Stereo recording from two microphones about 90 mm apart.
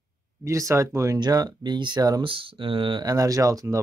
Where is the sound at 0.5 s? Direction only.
35° right (ahead or behind).